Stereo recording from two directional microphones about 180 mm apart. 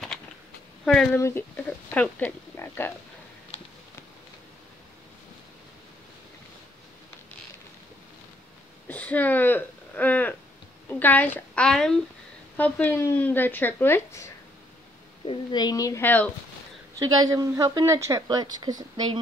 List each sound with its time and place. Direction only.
0.8 s speech: 5° left (ahead or behind)
8.8 s a woman's voice: 10° left (ahead or behind)
17.0 s a woman's voice: 20° right (ahead or behind)